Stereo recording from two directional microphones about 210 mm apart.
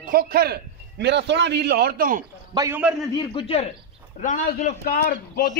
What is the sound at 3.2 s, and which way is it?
Speech, 25° left (ahead or behind).